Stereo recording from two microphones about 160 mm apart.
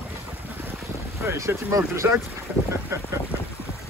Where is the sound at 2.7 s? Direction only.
15° right (ahead or behind).